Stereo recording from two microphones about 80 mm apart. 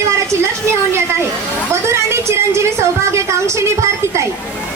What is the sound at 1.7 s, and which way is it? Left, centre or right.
A woman's voice, right.